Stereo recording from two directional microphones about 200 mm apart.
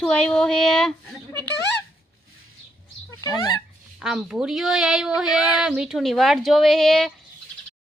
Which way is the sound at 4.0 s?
Centre (ahead or behind).